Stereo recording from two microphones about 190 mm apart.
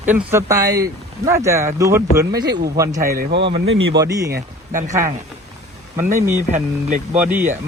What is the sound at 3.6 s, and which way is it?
Speech, 90° right.